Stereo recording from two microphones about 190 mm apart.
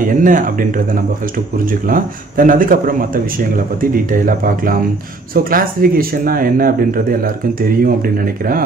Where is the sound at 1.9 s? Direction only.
45° right (ahead or behind).